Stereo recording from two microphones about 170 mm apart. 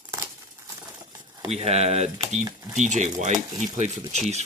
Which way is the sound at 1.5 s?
40° right (ahead or behind).